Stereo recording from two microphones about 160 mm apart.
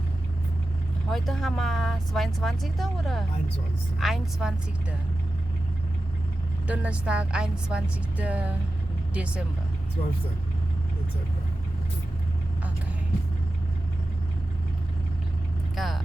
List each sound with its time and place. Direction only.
1.1 s speech: centre (ahead or behind)
6.7 s a woman's voice: 5° right (ahead or behind)
15.7 s vehicle: centre (ahead or behind)